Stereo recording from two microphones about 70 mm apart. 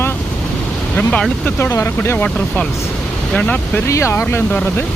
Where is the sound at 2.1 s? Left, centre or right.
Centre.